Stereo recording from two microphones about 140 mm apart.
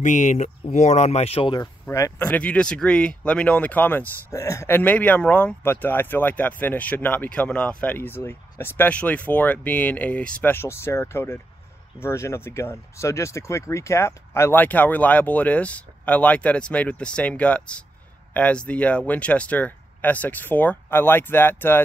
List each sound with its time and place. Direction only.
0.0 s speech: 60° left (ahead or behind); by 1.6 s 40° left (ahead or behind)
1.6 s speech: 20° left (ahead or behind)